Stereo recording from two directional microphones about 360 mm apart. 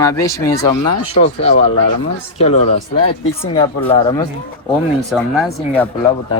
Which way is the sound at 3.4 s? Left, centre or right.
Centre.